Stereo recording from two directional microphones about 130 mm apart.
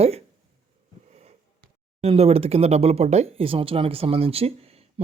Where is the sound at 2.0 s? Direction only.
50° right (ahead or behind).